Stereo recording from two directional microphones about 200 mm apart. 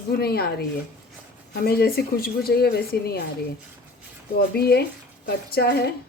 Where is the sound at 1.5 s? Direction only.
50° left (ahead or behind).